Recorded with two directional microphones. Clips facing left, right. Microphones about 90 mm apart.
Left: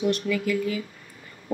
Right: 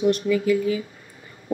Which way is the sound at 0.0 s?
20° right (ahead or behind).